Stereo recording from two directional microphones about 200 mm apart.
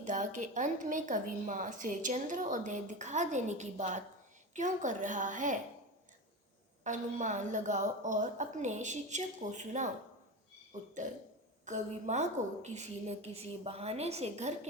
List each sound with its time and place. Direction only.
0.0 s a woman's voice: 40° right (ahead or behind)
6.8 s a woman's voice: 35° right (ahead or behind)